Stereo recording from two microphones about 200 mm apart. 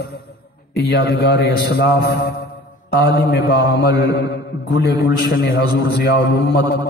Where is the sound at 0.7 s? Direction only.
55° left (ahead or behind).